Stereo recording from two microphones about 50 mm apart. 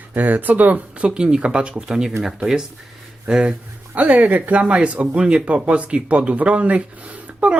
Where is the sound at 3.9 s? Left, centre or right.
Right.